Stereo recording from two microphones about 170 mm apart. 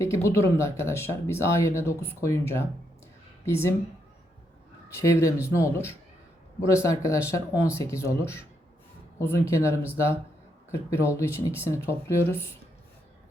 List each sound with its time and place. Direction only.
0.0 s speech: 15° left (ahead or behind)
4.9 s speech: 15° left (ahead or behind)